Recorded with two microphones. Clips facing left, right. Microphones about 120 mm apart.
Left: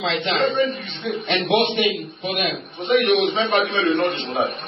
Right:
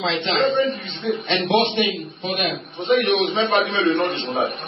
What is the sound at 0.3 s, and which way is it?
Speech, 30° right (ahead or behind).